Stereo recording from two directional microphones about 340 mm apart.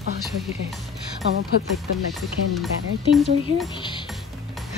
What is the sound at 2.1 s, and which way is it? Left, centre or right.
Music, centre.